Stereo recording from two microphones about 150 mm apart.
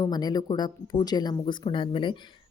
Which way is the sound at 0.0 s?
25° left (ahead or behind).